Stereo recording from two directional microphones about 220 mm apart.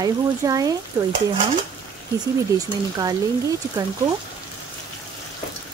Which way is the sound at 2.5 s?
15° right (ahead or behind).